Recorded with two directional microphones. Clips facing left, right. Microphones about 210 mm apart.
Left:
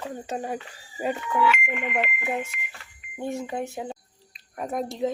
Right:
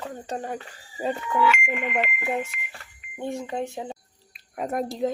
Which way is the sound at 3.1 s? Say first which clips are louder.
Even; 5° left (ahead or behind).